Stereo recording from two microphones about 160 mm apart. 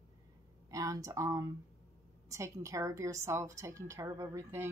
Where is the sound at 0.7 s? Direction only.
20° right (ahead or behind).